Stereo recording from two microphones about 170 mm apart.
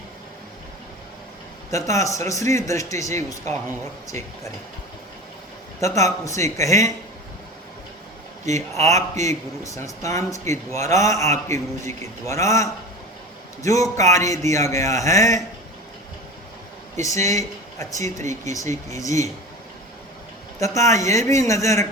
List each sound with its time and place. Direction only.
1.7 s a man's voice: 20° left (ahead or behind)
5.8 s a man's voice: 20° left (ahead or behind)
8.4 s a man's voice: 15° left (ahead or behind)
17.2 s a man's voice: 20° left (ahead or behind)
20.6 s a man's voice: 20° left (ahead or behind)